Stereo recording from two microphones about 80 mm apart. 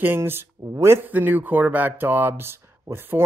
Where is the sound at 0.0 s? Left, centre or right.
Right.